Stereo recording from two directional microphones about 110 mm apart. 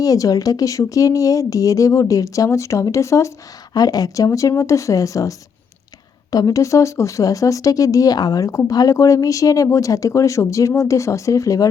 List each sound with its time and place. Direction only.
0.0 s speech: 30° left (ahead or behind)
6.3 s speech: 35° left (ahead or behind)